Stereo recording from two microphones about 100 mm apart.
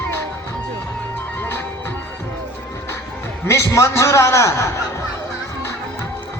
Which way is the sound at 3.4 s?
30° left (ahead or behind).